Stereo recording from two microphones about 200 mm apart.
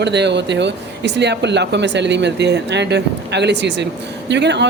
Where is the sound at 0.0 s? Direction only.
60° right (ahead or behind).